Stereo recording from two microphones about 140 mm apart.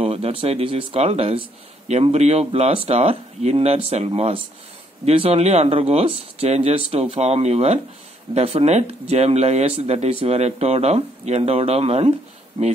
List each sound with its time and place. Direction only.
0.0 s speech: 45° right (ahead or behind)